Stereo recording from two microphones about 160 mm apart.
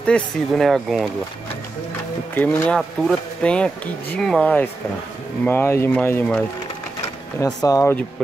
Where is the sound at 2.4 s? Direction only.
5° left (ahead or behind); by 7.9 s 20° left (ahead or behind).